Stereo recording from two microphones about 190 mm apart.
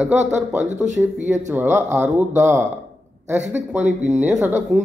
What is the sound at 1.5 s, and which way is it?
Speech, 10° right (ahead or behind).